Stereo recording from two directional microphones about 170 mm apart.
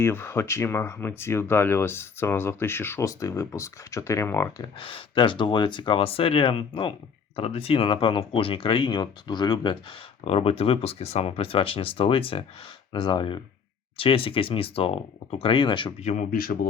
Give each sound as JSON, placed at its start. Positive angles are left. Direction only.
{"t": 0.0, "sound": "speech", "side_deg": 15}
{"t": 16.0, "sound": "speech", "side_deg": 55}